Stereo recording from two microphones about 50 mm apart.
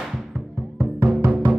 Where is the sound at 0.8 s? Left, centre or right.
Right.